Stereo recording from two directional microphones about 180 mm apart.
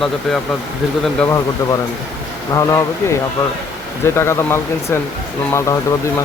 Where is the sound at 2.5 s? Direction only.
15° left (ahead or behind).